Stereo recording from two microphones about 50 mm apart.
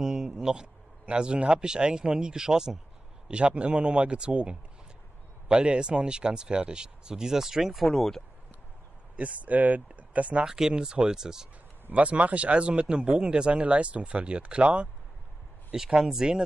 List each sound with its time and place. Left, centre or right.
0.0 s a sound: centre
1.0 s speech: centre
3.3 s speech: right
7.8 s speech: centre
9.1 s speech: right
10.4 s speech: centre
11.9 s speech: right
15.7 s speech: centre